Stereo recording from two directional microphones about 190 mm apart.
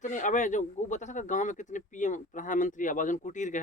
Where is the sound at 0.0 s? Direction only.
40° left (ahead or behind).